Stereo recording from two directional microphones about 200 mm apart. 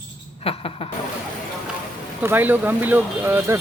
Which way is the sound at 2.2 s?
10° right (ahead or behind).